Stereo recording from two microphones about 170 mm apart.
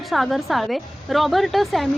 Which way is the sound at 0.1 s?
Centre (ahead or behind).